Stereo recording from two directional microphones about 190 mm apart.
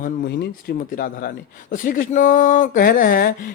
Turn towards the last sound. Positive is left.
turn(degrees=50)  # may be behind; listen again after turning